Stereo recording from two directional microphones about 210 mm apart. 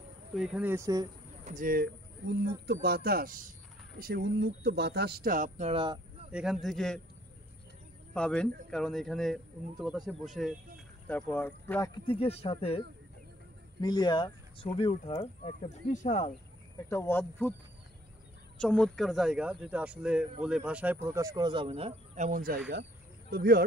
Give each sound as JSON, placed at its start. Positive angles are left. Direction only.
{"t": 0.3, "sound": "speech", "side_deg": -5}
{"t": 1.4, "sound": "speech", "side_deg": -40}
{"t": 6.3, "sound": "speech", "side_deg": 0}
{"t": 8.1, "sound": "speech", "side_deg": 5}
{"t": 12.1, "sound": "speech", "side_deg": 30}
{"t": 16.9, "sound": "speech", "side_deg": 10}
{"t": 18.6, "sound": "speech", "side_deg": 5}